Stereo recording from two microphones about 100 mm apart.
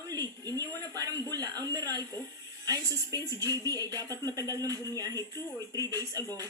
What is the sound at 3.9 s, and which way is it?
Speech, 25° left (ahead or behind).